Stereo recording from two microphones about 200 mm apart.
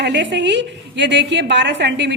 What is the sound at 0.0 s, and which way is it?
A woman's voice, 60° right (ahead or behind).